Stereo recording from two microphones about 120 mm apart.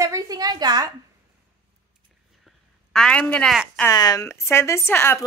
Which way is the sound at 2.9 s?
5° left (ahead or behind).